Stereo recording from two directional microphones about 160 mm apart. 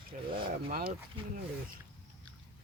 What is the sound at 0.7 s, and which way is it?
Speech, 65° right (ahead or behind).